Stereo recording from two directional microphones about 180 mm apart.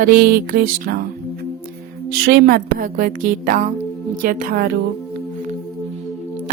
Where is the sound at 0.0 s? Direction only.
60° right (ahead or behind).